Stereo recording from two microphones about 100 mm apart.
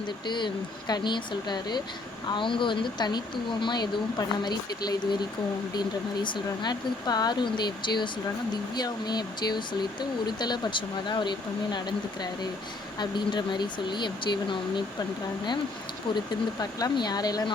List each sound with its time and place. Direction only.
0.3 s speech: 50° left (ahead or behind)
2.3 s speech: 55° left (ahead or behind)
16.6 s speech: 40° left (ahead or behind)